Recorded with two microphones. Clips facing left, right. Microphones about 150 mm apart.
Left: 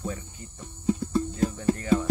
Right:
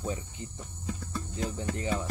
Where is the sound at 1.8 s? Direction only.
20° right (ahead or behind).